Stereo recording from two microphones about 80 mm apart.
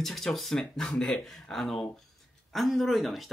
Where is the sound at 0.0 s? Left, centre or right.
Centre.